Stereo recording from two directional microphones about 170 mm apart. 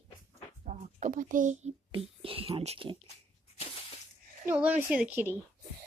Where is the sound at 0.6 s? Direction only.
45° right (ahead or behind).